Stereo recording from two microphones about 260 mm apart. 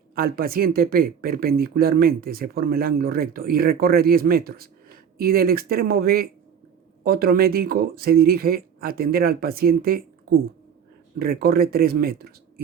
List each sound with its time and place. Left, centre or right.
0.2 s speech: right
11.2 s speech: right